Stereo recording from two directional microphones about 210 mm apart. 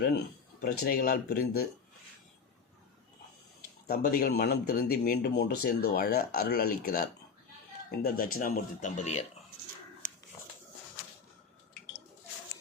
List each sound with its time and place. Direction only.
0.6 s speech: 45° left (ahead or behind)
3.8 s speech: 50° left (ahead or behind)